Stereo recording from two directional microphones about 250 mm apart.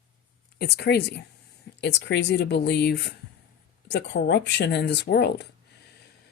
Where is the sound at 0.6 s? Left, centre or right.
Left.